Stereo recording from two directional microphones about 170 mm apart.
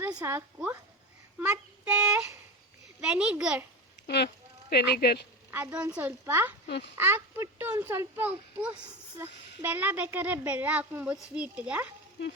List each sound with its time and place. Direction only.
0.0 s a child's voice: 20° right (ahead or behind)
4.0 s speech: 75° left (ahead or behind)
5.5 s speech: 10° right (ahead or behind)
6.7 s speech: 85° left
6.9 s speech: 15° right (ahead or behind)
12.2 s speech: 90° left